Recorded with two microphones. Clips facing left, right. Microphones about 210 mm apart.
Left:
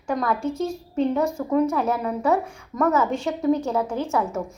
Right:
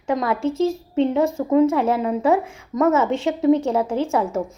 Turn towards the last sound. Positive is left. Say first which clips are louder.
# right 4 dB
turn(degrees=-25)  # may be behind; listen again after turning